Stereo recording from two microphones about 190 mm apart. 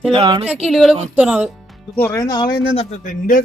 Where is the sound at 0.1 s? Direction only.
25° right (ahead or behind).